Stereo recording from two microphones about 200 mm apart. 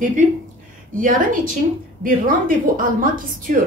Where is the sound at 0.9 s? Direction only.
45° right (ahead or behind).